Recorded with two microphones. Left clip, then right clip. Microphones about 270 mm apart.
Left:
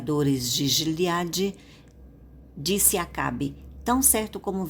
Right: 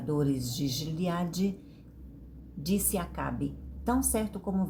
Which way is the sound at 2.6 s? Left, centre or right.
Left.